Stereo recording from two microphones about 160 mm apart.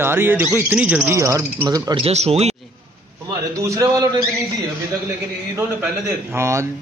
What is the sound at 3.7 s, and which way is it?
Speech, 20° right (ahead or behind).